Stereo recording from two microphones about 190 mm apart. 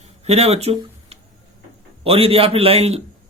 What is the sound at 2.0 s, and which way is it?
Speech, 30° right (ahead or behind).